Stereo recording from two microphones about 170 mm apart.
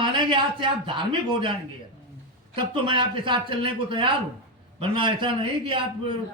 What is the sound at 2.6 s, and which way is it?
A man's voice, 30° right (ahead or behind).